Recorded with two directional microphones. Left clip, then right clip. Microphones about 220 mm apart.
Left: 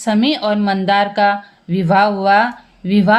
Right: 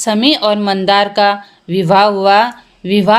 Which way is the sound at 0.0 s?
35° right (ahead or behind).